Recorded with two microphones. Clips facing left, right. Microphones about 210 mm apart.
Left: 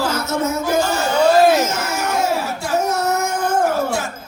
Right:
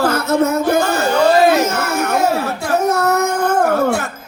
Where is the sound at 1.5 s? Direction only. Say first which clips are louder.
Right 2 dB; 60° right (ahead or behind).